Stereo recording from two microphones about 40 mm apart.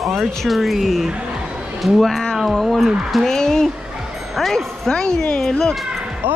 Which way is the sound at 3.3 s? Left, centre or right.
Centre.